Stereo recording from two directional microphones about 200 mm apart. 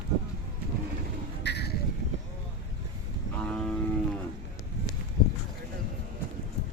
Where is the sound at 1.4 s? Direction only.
55° left (ahead or behind).